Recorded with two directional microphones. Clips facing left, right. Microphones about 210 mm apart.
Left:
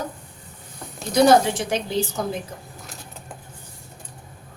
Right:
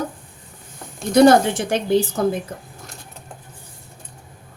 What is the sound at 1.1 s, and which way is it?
A woman's voice, 55° right (ahead or behind).